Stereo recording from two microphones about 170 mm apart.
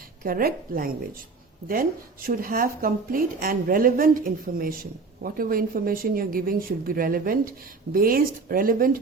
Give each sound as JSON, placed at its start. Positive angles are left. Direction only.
{"t": 0.2, "sound": "a woman's voice", "side_deg": -55}
{"t": 2.2, "sound": "a woman's voice", "side_deg": -55}